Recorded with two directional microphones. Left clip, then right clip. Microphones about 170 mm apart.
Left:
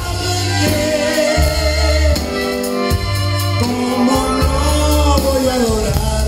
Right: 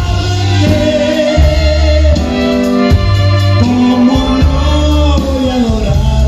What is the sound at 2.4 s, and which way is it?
Music, 15° right (ahead or behind).